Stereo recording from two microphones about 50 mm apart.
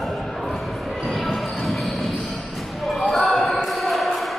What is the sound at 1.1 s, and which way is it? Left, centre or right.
Basketball bounce, centre.